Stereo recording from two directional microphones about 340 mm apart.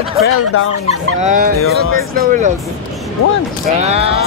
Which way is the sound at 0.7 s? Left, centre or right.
Right.